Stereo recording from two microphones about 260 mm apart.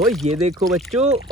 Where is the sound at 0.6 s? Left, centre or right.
Centre.